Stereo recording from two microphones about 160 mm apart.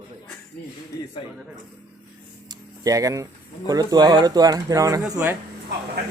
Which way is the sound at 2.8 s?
20° right (ahead or behind).